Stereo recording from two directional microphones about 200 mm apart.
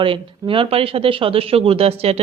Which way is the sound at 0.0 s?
25° right (ahead or behind).